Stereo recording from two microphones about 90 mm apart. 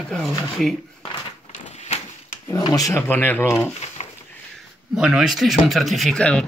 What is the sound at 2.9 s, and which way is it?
Speech, 20° left (ahead or behind).